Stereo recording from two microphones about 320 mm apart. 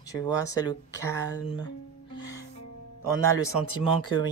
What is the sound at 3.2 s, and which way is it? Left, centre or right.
Speech, centre.